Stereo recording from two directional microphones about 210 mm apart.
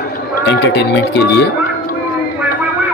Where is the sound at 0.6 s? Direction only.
55° left (ahead or behind).